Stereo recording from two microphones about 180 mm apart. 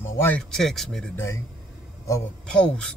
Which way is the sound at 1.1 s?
15° left (ahead or behind).